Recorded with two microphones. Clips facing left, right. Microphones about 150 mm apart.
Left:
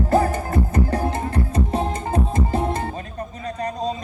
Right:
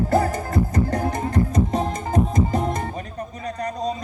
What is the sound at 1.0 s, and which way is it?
Music, 30° left (ahead or behind).